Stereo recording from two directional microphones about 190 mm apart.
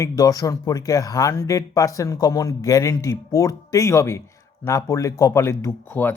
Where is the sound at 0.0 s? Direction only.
20° left (ahead or behind).